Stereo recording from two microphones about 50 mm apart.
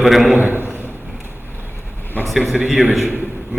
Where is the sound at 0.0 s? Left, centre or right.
Centre.